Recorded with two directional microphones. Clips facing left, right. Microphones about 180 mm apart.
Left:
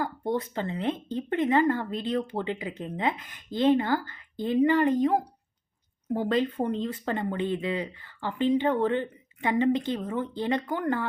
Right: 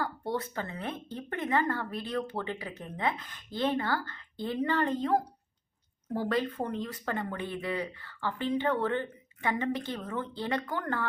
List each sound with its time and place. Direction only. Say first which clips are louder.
0.0 s speech: left 4 dB; 20° left (ahead or behind)